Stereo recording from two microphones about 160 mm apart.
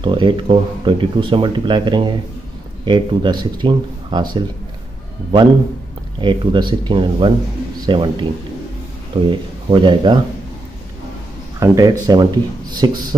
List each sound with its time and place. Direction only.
0.0 s speech: 30° right (ahead or behind)
6.2 s speech: 30° right (ahead or behind)
11.6 s speech: 20° right (ahead or behind)